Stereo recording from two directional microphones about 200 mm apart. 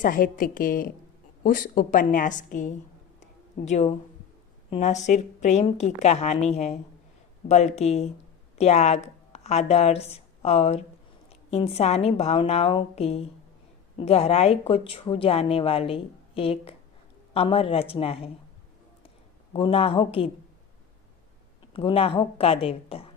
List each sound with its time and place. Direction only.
0.0 s a woman's voice: 45° left (ahead or behind)
3.2 s a sound: 35° left (ahead or behind)
4.7 s a woman's voice: 35° left (ahead or behind)
19.5 s a woman's voice: 25° left (ahead or behind)
21.7 s a woman's voice: 25° left (ahead or behind)